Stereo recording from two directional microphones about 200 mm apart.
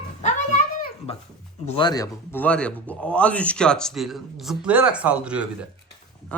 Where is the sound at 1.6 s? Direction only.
25° left (ahead or behind); by 5.5 s 5° right (ahead or behind).